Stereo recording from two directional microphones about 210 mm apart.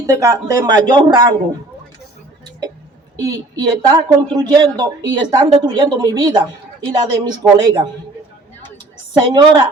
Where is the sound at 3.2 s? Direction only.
15° right (ahead or behind).